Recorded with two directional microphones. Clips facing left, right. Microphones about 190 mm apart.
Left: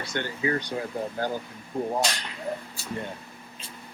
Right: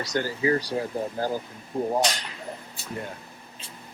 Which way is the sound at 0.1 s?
35° right (ahead or behind).